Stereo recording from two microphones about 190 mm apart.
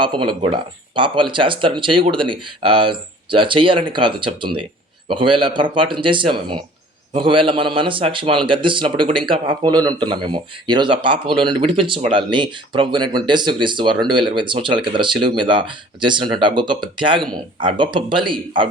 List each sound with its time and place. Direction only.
0.0 s a man's voice: 25° right (ahead or behind)